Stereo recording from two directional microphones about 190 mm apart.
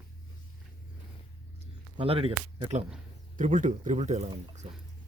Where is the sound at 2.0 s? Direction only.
30° right (ahead or behind).